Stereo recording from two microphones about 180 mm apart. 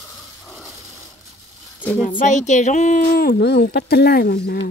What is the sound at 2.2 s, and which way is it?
Speech, 40° left (ahead or behind).